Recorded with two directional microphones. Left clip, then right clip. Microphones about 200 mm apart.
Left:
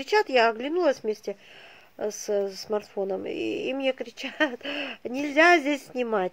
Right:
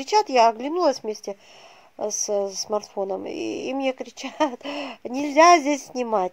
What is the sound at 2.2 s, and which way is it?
Speech, 10° right (ahead or behind).